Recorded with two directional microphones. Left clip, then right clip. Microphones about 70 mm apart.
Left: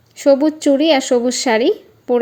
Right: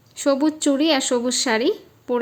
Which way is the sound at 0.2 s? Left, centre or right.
Left.